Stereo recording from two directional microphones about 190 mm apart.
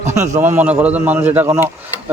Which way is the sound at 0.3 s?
10° right (ahead or behind).